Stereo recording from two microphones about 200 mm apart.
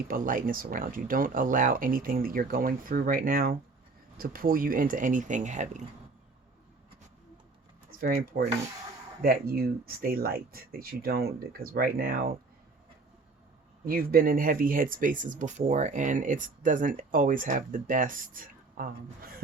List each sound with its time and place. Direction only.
0.1 s speech: 45° right (ahead or behind)
8.0 s speech: 45° right (ahead or behind)
13.8 s speech: 45° right (ahead or behind)